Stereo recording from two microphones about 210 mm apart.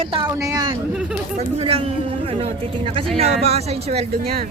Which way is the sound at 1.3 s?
30° right (ahead or behind).